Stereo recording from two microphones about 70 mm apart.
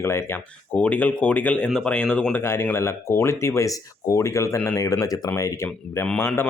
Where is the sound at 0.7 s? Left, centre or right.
Left.